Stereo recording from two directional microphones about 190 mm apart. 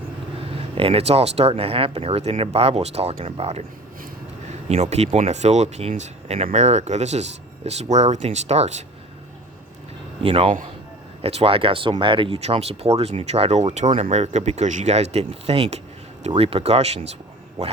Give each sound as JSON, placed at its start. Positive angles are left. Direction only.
{"t": 0.8, "sound": "speech", "side_deg": -30}
{"t": 4.7, "sound": "speech", "side_deg": -35}
{"t": 10.2, "sound": "a man's voice", "side_deg": -30}